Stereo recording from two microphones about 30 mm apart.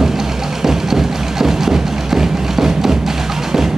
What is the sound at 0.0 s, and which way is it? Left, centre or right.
Music, centre.